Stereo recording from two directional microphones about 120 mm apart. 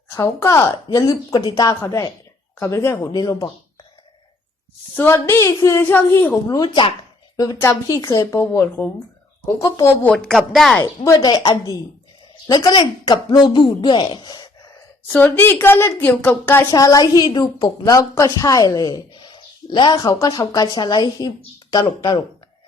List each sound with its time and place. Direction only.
0.1 s a woman's voice: 25° left (ahead or behind)
4.9 s a woman's voice: 20° left (ahead or behind)
6.5 s a woman's voice: 40° left (ahead or behind)
7.3 s speech: 25° left (ahead or behind)
10.0 s a woman's voice: 10° left (ahead or behind)
11.0 s a woman's voice: 30° left (ahead or behind)
15.0 s a woman's voice: 15° left (ahead or behind)
16.7 s a woman's voice: 30° left (ahead or behind)